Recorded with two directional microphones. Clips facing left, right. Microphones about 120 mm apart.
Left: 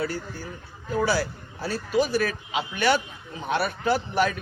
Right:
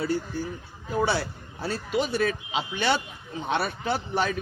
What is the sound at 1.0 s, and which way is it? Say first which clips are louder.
A man's voice: left 3 dB; 25° right (ahead or behind).